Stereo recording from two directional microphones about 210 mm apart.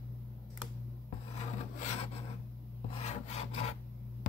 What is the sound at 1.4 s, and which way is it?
Wood, 30° left (ahead or behind).